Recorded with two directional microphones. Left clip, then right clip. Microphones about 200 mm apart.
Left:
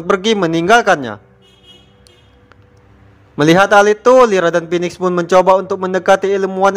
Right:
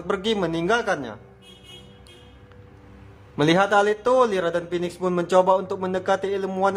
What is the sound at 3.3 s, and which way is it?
A man's voice, 30° left (ahead or behind).